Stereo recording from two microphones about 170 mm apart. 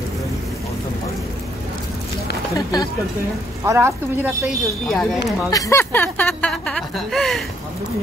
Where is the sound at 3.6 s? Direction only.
15° right (ahead or behind).